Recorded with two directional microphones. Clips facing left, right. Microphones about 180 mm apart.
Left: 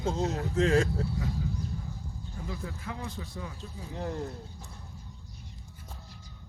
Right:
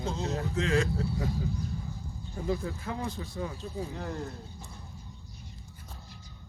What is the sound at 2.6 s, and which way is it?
Speech, 35° right (ahead or behind).